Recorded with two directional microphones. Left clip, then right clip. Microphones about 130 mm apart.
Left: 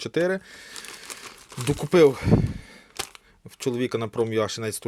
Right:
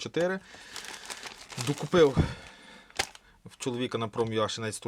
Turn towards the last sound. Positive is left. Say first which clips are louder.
# left 4 dB
turn(degrees=30)  # may be behind; listen again after turning